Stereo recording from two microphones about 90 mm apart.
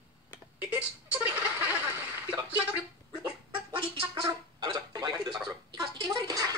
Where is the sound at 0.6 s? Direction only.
20° right (ahead or behind).